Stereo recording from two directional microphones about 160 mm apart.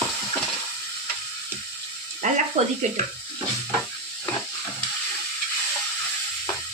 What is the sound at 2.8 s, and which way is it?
Speech, 45° right (ahead or behind).